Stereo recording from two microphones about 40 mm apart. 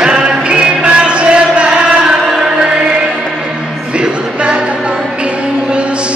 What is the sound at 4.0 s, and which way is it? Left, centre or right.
Music, right.